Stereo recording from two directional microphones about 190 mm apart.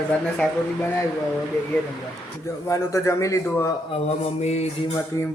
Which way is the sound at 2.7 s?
15° left (ahead or behind).